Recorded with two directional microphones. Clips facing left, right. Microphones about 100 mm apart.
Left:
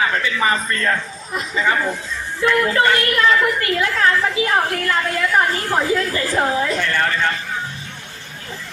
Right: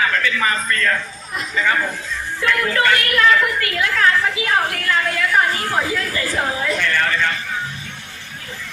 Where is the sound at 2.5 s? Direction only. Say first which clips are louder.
Left 2 dB; 25° left (ahead or behind).